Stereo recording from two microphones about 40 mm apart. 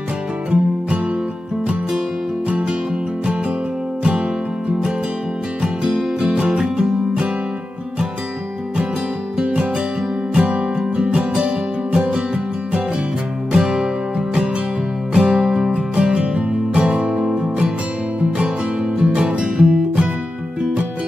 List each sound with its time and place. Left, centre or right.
0.5 s music: right
4.6 s music: centre
9.4 s music: right
10.8 s music: centre
13.5 s music: centre
15.1 s music: centre
15.7 s music: right
18.9 s music: right